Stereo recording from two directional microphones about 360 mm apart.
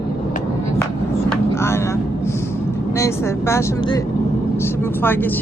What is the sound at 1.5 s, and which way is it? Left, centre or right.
Vehicle, centre.